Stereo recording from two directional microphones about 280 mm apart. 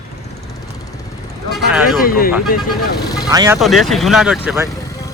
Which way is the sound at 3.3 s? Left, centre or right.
Centre.